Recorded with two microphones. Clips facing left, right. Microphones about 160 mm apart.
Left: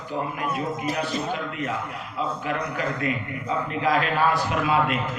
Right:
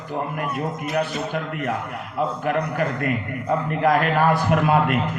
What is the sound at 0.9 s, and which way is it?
A man's voice, 55° right (ahead or behind).